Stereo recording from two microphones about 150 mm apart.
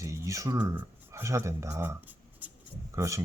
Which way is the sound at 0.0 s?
20° right (ahead or behind).